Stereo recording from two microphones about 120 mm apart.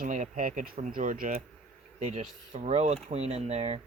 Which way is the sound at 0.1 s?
90° right.